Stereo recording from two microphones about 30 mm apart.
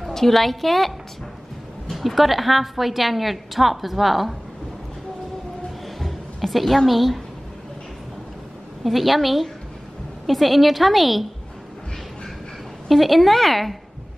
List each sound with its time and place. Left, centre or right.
0.0 s a woman's voice: centre
5.9 s a sound: centre
6.9 s a woman's voice: centre
8.8 s a woman's voice: centre
12.8 s a woman's voice: centre